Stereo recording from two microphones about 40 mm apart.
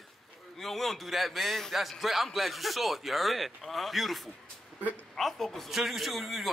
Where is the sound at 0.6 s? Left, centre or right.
Centre.